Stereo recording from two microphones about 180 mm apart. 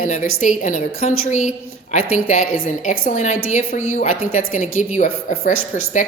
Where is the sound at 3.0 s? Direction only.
40° left (ahead or behind).